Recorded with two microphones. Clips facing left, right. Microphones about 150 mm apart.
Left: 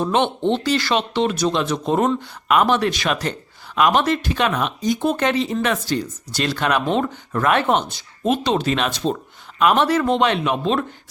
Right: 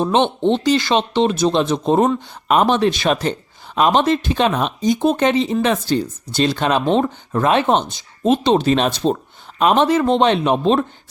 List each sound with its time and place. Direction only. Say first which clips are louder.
0.0 s speech: right 3 dB; 20° right (ahead or behind)